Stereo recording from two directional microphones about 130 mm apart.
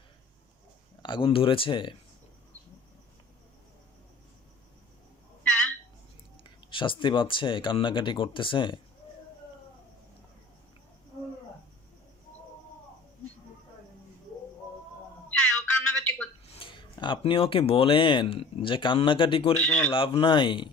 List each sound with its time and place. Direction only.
1.0 s speech: 40° left (ahead or behind)
6.4 s speech: 40° left (ahead or behind)
15.3 s a sound: 10° left (ahead or behind)
16.6 s speech: 40° left (ahead or behind)
19.5 s a man's voice: 10° left (ahead or behind)
19.9 s speech: 40° left (ahead or behind)